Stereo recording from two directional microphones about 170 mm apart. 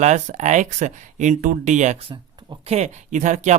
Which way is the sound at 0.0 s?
45° right (ahead or behind).